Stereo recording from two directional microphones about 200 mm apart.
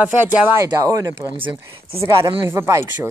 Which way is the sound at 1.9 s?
15° right (ahead or behind).